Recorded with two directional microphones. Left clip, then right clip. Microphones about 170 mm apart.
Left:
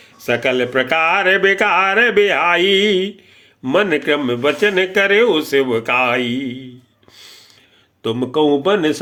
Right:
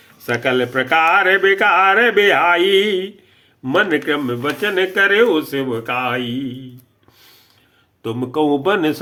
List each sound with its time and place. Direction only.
0.3 s speech: 25° left (ahead or behind)
8.0 s a man's voice: 15° left (ahead or behind)